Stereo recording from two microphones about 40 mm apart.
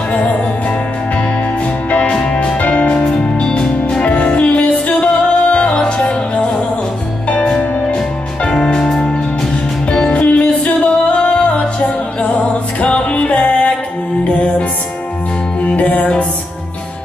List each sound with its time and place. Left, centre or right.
0.1 s music: left
4.0 s music: left
10.2 s music: left
12.8 s music: left
15.6 s music: left